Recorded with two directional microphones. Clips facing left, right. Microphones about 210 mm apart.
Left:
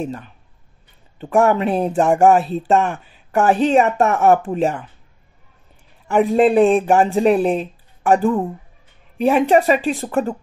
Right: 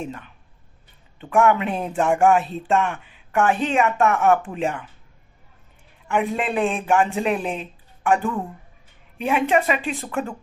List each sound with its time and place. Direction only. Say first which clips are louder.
0.0 s speech: left 6 dB; 35° left (ahead or behind)
6.0 s speech: left 9 dB; 35° left (ahead or behind)